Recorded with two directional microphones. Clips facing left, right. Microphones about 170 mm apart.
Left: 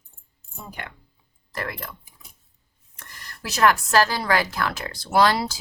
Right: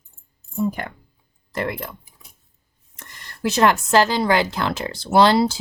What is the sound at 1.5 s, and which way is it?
Speech, 25° right (ahead or behind).